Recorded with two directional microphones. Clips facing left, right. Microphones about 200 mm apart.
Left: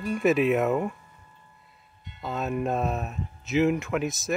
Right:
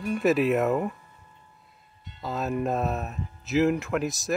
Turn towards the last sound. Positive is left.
turn(degrees=0)  # may be behind; listen again after turning